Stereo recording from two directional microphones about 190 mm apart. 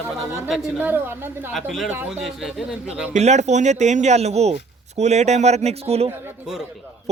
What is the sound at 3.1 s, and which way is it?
Speech, 35° right (ahead or behind).